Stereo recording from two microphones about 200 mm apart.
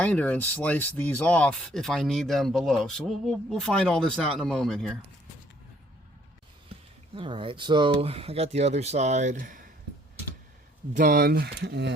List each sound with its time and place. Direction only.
0.0 s speech: 10° left (ahead or behind)
7.2 s speech: 25° right (ahead or behind)
10.9 s speech: 45° right (ahead or behind)